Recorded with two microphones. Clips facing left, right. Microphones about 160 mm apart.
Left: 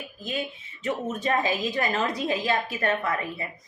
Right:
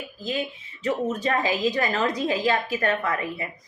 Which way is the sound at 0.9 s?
25° left (ahead or behind).